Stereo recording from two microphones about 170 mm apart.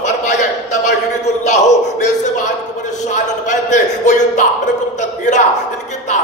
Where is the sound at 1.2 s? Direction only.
40° left (ahead or behind).